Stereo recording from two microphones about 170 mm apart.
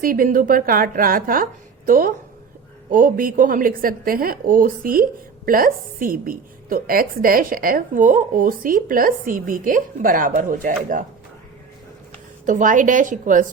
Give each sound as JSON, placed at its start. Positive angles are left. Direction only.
{"t": 0.0, "sound": "a woman's voice", "side_deg": -55}
{"t": 12.5, "sound": "a woman's voice", "side_deg": -50}